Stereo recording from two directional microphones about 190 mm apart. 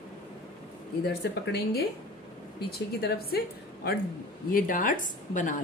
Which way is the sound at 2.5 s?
55° left (ahead or behind).